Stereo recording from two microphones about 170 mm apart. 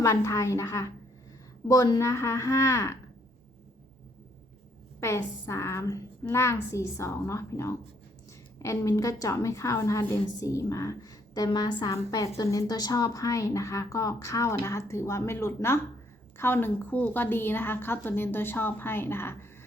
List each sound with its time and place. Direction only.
0.0 s a woman's voice: 15° left (ahead or behind)
4.9 s a woman's voice: 15° left (ahead or behind)